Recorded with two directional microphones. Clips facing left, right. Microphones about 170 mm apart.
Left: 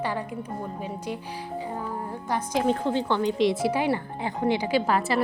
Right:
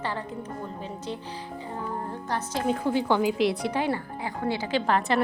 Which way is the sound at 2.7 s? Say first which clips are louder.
Right 2 dB; 10° right (ahead or behind).